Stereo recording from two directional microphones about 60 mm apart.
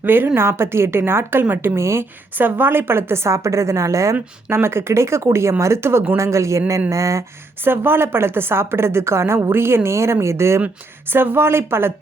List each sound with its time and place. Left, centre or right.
0.0 s a woman's voice: right
2.4 s a woman's voice: right
4.1 s a woman's voice: right
7.6 s a woman's voice: right
11.1 s a woman's voice: right